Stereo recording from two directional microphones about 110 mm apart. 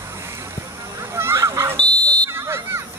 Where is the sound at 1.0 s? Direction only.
25° right (ahead or behind).